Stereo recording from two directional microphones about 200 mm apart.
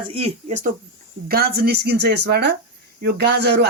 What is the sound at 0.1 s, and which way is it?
Speech, 35° right (ahead or behind).